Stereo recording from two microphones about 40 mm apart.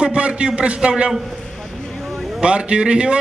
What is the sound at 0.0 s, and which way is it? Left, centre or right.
A man's voice, right.